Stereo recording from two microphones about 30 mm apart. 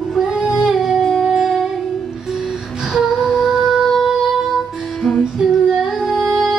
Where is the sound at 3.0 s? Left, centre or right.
Centre.